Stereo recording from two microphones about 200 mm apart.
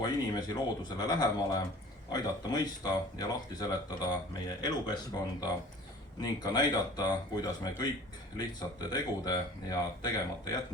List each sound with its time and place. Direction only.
0.0 s speech: 20° left (ahead or behind)